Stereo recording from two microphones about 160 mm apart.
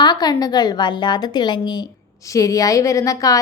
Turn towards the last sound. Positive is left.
turn(degrees=20)  # may be behind; listen again after turning